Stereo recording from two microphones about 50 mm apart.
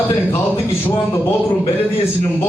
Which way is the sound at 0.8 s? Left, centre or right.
Left.